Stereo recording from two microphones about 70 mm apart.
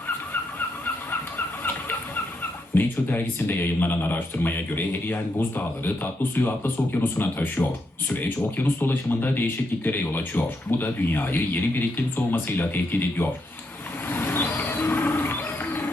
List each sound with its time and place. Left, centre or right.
2.4 s speech: left
14.1 s wild animals: left